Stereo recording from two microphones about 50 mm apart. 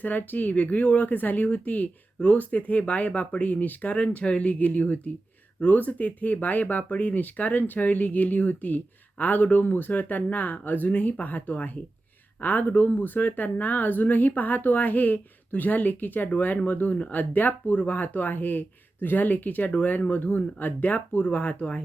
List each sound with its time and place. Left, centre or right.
0.0 s speech: left
3.9 s speech: left